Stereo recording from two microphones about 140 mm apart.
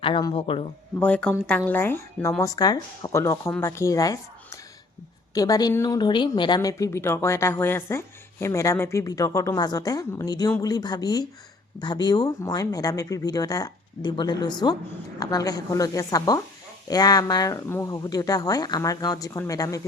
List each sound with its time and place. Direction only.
0.0 s a man's voice: 35° left (ahead or behind)
0.9 s speech: 10° left (ahead or behind); by 4.2 s 25° left (ahead or behind)
5.3 s speech: 25° left (ahead or behind)